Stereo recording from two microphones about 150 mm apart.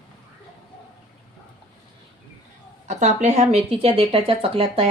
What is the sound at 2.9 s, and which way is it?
Speech, 50° right (ahead or behind).